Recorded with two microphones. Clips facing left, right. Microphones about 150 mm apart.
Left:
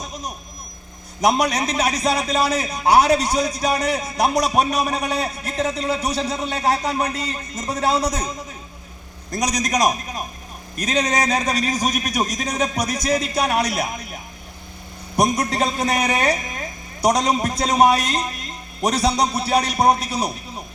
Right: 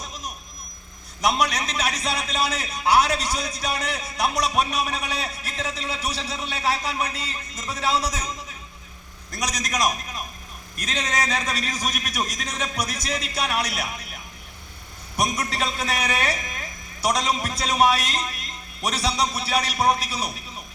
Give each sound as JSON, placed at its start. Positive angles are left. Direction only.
{"t": 1.2, "sound": "a man's voice", "side_deg": 40}
{"t": 9.3, "sound": "a man's voice", "side_deg": 40}